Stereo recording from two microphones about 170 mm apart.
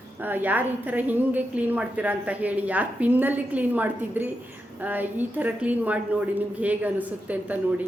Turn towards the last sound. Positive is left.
turn(degrees=-10)  # may be behind; listen again after turning